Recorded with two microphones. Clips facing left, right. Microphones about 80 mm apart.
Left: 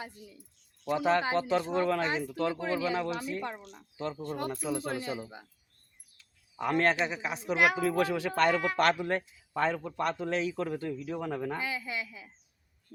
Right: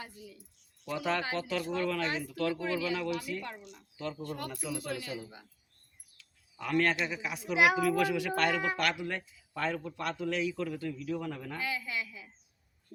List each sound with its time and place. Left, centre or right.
0.9 s speech: left
7.5 s a woman's voice: centre
7.8 s a man's voice: left
11.6 s speech: left